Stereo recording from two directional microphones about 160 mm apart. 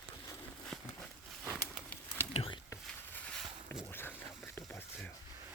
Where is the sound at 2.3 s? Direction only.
35° left (ahead or behind).